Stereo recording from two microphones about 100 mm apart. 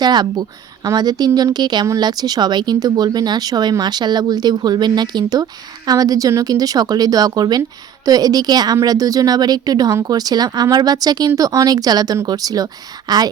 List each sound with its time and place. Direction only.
0.0 s a woman's voice: 45° right (ahead or behind)